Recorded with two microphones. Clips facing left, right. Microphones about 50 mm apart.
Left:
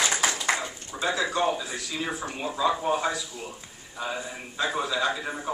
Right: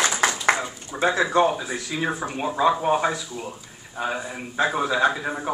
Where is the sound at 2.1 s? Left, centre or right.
Right.